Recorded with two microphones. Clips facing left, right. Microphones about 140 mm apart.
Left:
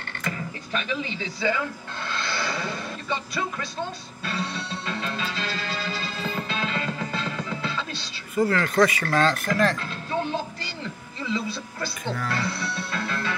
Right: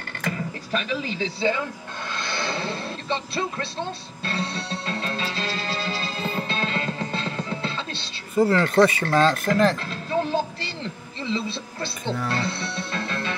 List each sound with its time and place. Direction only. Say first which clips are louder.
0.7 s speech: right 2 dB; 35° right (ahead or behind)
2.1 s music: right 1 dB; 20° right (ahead or behind)
10.3 s a sound: right 4 dB; 25° right (ahead or behind)